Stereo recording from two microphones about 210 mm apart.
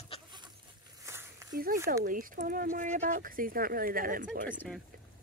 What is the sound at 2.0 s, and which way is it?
Speech, 40° right (ahead or behind).